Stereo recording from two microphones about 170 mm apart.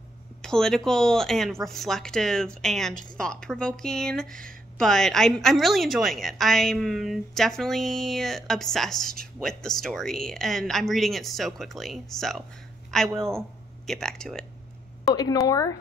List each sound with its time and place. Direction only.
0.4 s a woman's voice: 5° left (ahead or behind)
15.1 s speech: 20° left (ahead or behind)